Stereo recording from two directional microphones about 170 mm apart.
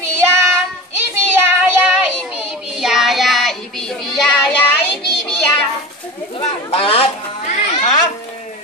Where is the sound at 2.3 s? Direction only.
5° right (ahead or behind).